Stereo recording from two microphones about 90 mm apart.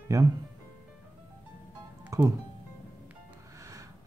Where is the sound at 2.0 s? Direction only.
35° right (ahead or behind).